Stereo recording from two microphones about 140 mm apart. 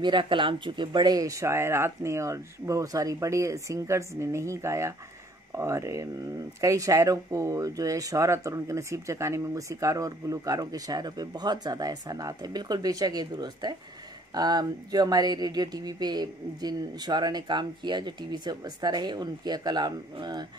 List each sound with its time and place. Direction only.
0.0 s speech: 35° right (ahead or behind)